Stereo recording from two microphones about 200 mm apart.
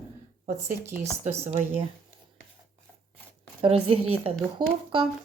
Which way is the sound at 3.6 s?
30° right (ahead or behind).